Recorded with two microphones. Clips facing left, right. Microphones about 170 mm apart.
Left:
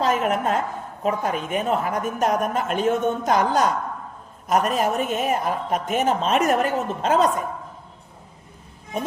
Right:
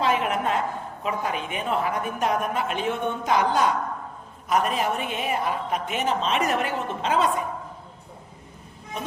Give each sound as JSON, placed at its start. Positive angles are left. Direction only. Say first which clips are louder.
{"t": 0.0, "sound": "a woman's voice", "louder": "left 2 dB", "side_deg": 45}